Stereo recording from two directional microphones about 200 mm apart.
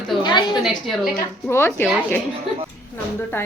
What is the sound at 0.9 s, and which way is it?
Speech, centre (ahead or behind).